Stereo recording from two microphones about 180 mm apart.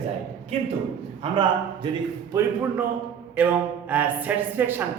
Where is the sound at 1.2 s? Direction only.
30° right (ahead or behind).